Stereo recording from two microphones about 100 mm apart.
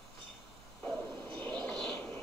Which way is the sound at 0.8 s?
20° left (ahead or behind).